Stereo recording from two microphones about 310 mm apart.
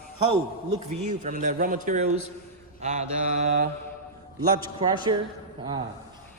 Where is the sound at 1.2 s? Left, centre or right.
Right.